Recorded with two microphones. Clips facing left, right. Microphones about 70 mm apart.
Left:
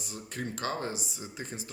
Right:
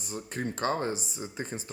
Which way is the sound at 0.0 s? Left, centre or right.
Right.